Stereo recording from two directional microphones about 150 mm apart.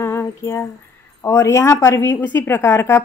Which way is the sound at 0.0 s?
20° left (ahead or behind).